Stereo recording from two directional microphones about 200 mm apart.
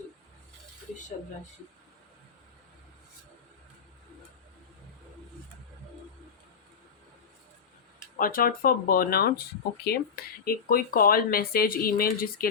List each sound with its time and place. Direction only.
8.2 s speech: 45° left (ahead or behind)